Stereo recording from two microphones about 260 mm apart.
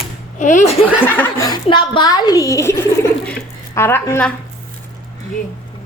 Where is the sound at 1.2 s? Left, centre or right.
Centre.